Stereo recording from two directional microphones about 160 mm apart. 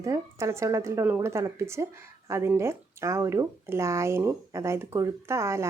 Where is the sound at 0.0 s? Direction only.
20° right (ahead or behind).